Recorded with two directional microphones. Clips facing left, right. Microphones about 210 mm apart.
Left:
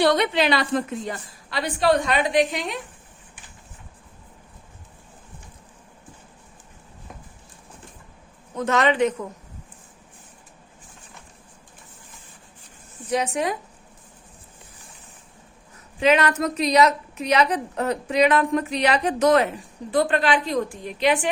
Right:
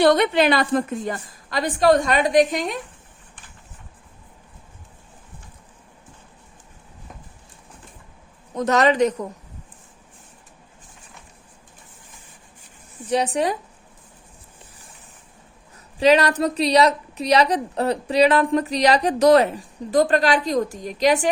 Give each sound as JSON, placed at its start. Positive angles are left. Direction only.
{"t": 0.0, "sound": "a woman's voice", "side_deg": -50}
{"t": 8.5, "sound": "a woman's voice", "side_deg": -40}
{"t": 13.1, "sound": "a woman's voice", "side_deg": -35}
{"t": 16.0, "sound": "a woman's voice", "side_deg": -35}